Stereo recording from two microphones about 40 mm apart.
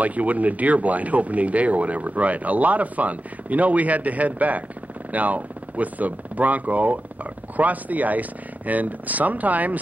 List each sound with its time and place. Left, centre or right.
0.0 s speech: right